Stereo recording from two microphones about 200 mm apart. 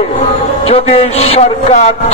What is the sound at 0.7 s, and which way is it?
Speech, 30° left (ahead or behind).